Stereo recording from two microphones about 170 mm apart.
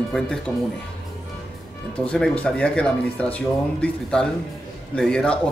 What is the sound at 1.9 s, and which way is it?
Speech, 5° left (ahead or behind).